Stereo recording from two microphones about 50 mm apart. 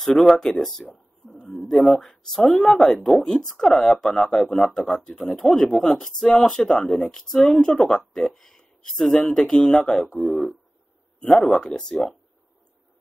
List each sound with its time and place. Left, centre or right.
0.0 s speech: centre
10.1 s speech: centre
11.5 s speech: centre